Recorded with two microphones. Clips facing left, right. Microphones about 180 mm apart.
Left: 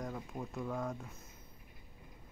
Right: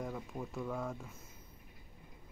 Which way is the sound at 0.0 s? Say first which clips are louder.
Right 1 dB; 5° left (ahead or behind).